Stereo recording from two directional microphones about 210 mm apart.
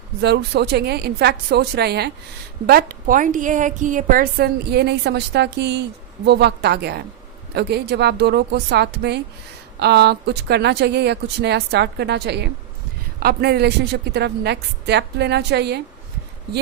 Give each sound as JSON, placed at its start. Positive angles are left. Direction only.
{"t": 0.2, "sound": "a woman's voice", "side_deg": -50}